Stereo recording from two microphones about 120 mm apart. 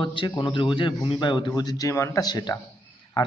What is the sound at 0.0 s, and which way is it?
A man's voice, 45° left (ahead or behind).